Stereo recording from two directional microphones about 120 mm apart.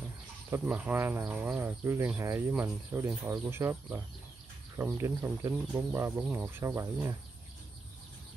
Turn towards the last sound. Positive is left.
turn(degrees=-25)  # may be behind; listen again after turning